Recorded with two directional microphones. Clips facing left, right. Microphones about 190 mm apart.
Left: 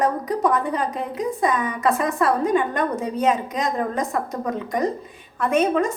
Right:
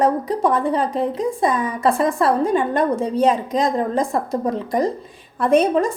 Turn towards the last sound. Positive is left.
turn(degrees=-35)  # may be behind; listen again after turning